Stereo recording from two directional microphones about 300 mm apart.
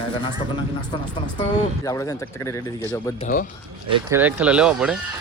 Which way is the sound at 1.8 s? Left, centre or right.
Centre.